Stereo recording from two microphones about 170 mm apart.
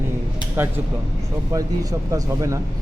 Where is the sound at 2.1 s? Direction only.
20° right (ahead or behind).